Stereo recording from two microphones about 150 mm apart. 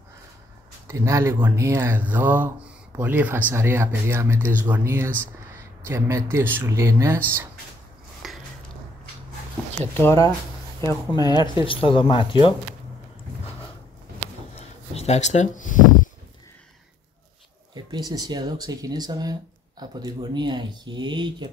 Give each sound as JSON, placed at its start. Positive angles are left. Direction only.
{"t": 0.8, "sound": "speech", "side_deg": -20}
{"t": 8.2, "sound": "a sound", "side_deg": 0}
{"t": 9.9, "sound": "speech", "side_deg": 20}
{"t": 15.0, "sound": "speech", "side_deg": 50}
{"t": 17.7, "sound": "speech", "side_deg": -25}